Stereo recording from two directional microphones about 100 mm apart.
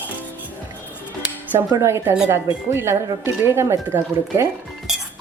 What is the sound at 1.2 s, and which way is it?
Music, 15° right (ahead or behind).